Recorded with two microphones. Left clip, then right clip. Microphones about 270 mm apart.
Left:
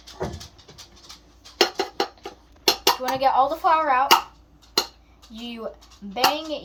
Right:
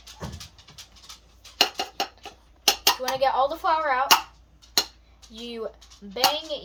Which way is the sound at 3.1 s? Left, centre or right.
Right.